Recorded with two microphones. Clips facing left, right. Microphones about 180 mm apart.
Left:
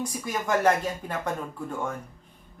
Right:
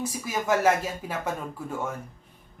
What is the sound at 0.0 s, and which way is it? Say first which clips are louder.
Speech: right 1 dB; 5° right (ahead or behind).